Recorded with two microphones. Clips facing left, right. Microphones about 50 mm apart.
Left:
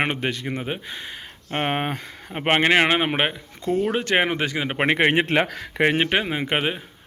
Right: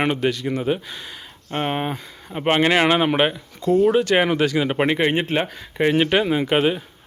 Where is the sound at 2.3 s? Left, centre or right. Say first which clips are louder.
Right 1 dB; left.